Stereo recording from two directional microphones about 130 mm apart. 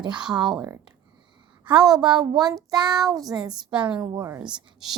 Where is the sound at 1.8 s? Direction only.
30° right (ahead or behind).